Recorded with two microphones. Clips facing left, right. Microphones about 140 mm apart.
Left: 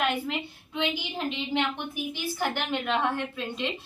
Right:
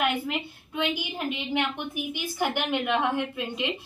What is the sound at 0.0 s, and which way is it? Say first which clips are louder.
A woman's voice: right 1 dB; 10° right (ahead or behind).